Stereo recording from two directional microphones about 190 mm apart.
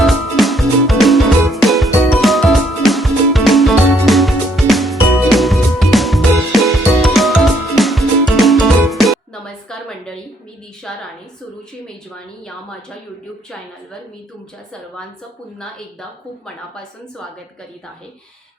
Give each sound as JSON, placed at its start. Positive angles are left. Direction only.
{"t": 0.0, "sound": "music", "side_deg": 0}
{"t": 10.8, "sound": "a sound", "side_deg": 0}
{"t": 11.9, "sound": "speech", "side_deg": 5}